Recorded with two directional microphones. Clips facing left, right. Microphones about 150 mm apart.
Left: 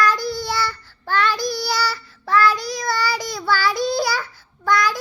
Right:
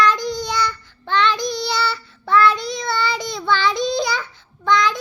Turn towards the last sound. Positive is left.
turn(degrees=-20)  # may be behind; listen again after turning